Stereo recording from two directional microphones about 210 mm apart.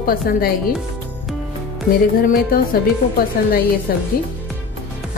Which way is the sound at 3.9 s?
45° left (ahead or behind).